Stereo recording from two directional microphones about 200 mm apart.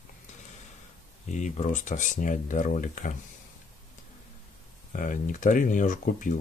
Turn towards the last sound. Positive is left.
turn(degrees=40)  # may be behind; listen again after turning